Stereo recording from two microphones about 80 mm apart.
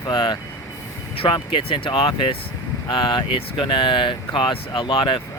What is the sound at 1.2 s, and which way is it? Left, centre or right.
Speech, left.